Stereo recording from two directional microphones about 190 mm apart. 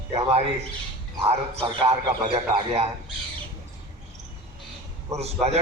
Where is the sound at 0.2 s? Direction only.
35° right (ahead or behind).